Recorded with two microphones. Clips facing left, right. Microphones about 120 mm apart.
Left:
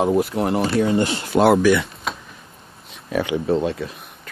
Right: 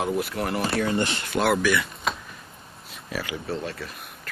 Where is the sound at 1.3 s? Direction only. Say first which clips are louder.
Left 8 dB; 90° left.